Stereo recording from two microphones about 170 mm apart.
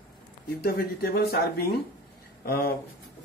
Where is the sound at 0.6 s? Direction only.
65° left (ahead or behind).